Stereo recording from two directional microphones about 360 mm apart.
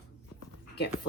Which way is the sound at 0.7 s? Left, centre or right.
Left.